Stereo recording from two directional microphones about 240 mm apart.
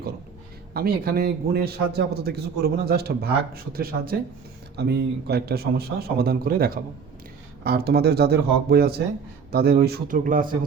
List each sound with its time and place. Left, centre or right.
0.7 s a man's voice: right